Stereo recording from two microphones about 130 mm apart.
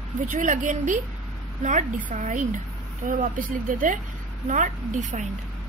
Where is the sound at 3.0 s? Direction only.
90° right.